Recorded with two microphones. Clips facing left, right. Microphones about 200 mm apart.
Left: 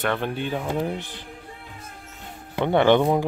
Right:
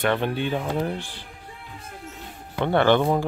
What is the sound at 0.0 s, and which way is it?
Speech, 5° right (ahead or behind).